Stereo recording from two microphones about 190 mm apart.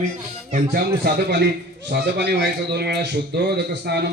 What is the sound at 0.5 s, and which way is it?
A man's voice, 55° right (ahead or behind).